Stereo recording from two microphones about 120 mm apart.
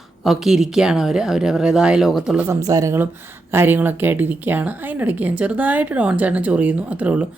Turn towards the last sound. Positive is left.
turn(degrees=-10)  # may be behind; listen again after turning